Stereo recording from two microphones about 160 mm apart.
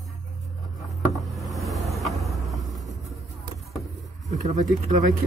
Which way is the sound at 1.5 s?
Centre (ahead or behind).